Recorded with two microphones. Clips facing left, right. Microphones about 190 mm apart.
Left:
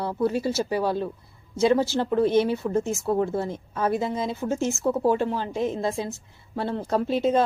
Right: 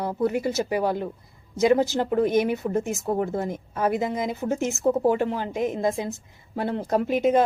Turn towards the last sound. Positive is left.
turn(degrees=-15)  # may be behind; listen again after turning